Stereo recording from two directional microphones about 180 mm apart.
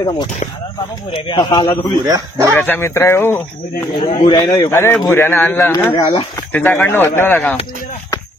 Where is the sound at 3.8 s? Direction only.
25° left (ahead or behind).